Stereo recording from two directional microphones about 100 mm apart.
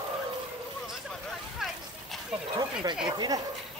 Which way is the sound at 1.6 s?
5° right (ahead or behind).